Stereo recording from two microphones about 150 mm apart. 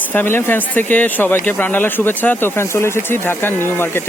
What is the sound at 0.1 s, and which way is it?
Speech, 15° left (ahead or behind).